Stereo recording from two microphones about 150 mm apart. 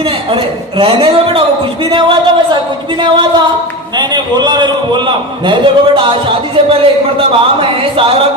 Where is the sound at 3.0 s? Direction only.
30° right (ahead or behind).